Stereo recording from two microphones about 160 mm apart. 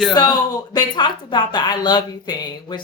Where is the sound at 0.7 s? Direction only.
30° left (ahead or behind).